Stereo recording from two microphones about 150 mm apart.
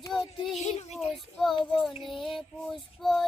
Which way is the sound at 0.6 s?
45° left (ahead or behind).